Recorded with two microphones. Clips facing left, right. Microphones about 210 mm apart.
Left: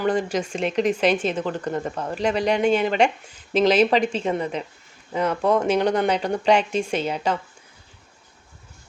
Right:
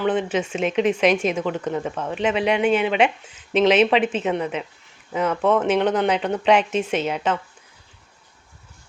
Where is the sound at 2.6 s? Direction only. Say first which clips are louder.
Even; 35° left (ahead or behind).